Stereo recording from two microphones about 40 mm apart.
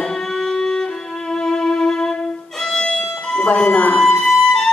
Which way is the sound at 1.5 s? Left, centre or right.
Centre.